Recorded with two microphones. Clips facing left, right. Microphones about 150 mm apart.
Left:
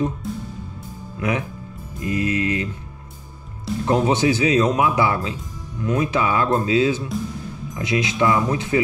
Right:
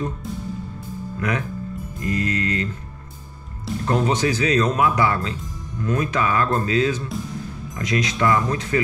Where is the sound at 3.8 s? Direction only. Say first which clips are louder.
Left 3 dB; 20° left (ahead or behind).